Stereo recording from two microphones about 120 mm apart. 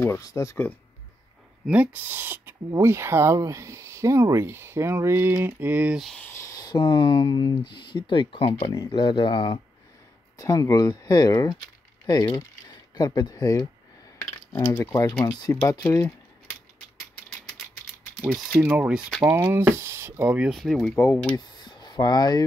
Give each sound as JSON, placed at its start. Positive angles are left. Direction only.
{"t": 0.2, "sound": "speech", "side_deg": 25}
{"t": 1.7, "sound": "speech", "side_deg": -15}
{"t": 6.1, "sound": "speech", "side_deg": 20}
{"t": 10.3, "sound": "speech", "side_deg": 30}
{"t": 14.5, "sound": "speech", "side_deg": 15}
{"t": 15.0, "sound": "speech", "side_deg": 30}
{"t": 18.6, "sound": "speech", "side_deg": -10}
{"t": 20.9, "sound": "speech", "side_deg": 25}
{"t": 21.5, "sound": "a sound", "side_deg": 35}